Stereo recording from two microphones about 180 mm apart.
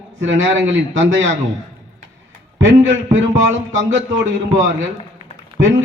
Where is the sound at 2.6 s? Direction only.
90° right.